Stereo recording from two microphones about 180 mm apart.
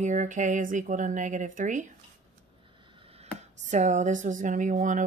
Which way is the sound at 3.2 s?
40° right (ahead or behind).